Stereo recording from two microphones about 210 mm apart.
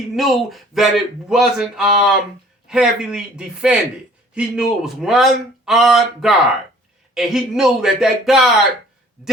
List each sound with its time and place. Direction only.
0.2 s speech: centre (ahead or behind)